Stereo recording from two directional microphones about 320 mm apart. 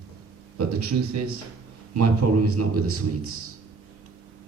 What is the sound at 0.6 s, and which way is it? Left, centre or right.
A man's voice, right.